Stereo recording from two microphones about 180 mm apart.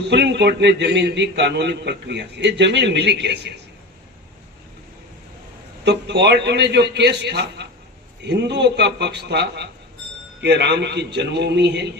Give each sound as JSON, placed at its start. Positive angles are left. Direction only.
{"t": 0.1, "sound": "a man's voice", "side_deg": -70}
{"t": 5.8, "sound": "a man's voice", "side_deg": -70}